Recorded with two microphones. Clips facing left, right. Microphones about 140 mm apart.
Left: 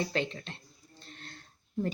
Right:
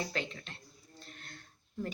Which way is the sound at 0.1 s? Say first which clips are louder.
Left 6 dB; 30° left (ahead or behind).